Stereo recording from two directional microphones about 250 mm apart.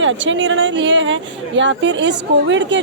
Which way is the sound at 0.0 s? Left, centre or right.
Right.